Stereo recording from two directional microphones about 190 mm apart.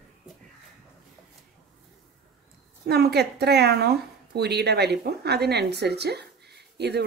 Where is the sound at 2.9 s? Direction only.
60° right (ahead or behind).